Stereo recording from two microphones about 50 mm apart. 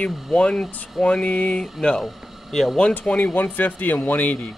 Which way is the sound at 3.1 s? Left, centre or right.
Left.